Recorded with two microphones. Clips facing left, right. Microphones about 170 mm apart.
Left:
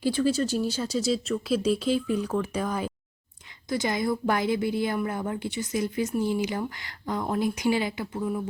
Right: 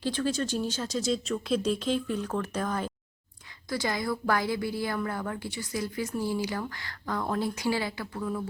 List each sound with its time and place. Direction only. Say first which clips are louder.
0.0 s speech: left 5 dB; 10° left (ahead or behind)
3.7 s a woman's voice: left 4 dB; 20° left (ahead or behind)